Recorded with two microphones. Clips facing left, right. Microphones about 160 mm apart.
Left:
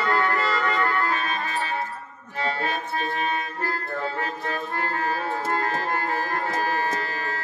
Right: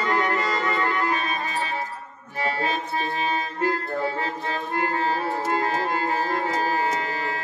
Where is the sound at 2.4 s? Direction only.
10° right (ahead or behind).